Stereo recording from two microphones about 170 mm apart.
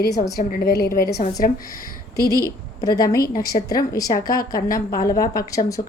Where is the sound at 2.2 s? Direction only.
20° left (ahead or behind).